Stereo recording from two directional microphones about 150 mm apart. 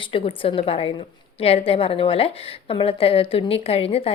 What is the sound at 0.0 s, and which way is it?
A woman's voice, 35° left (ahead or behind).